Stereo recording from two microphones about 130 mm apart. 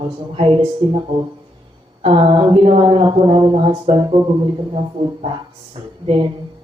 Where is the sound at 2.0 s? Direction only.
40° right (ahead or behind).